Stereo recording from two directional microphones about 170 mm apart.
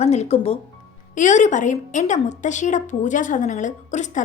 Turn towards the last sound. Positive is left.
turn(degrees=45)  # may be behind; listen again after turning